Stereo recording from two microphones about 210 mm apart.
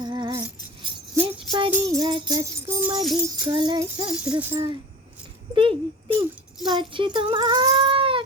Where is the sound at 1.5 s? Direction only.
20° right (ahead or behind).